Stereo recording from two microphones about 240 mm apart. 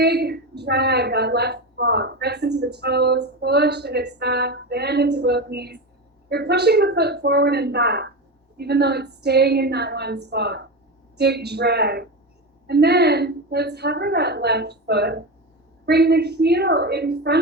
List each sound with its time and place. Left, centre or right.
0.0 s a woman's voice: right